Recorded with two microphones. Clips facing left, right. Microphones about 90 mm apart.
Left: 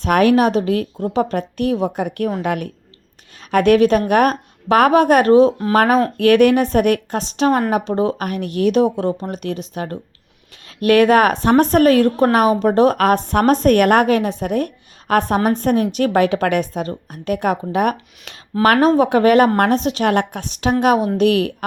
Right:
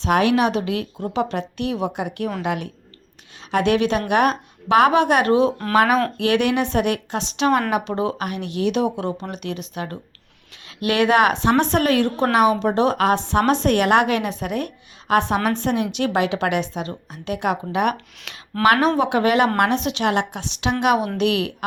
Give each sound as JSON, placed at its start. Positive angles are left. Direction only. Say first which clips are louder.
{"t": 0.0, "sound": "a woman's voice", "louder": "left 4 dB", "side_deg": 45}